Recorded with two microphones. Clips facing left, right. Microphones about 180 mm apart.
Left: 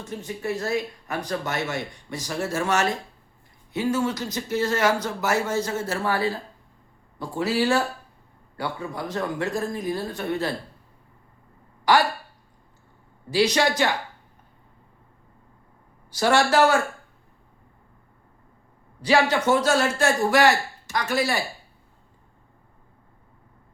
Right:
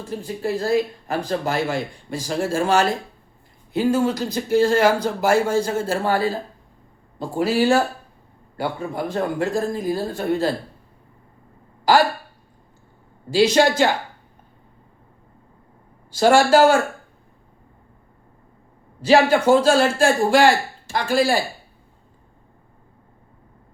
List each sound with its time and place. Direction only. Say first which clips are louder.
0.0 s speech: right 5 dB; 30° right (ahead or behind)
13.3 s speech: right 5 dB; 25° right (ahead or behind)
16.1 s speech: right 5 dB; 25° right (ahead or behind)
19.0 s speech: right 5 dB; 25° right (ahead or behind)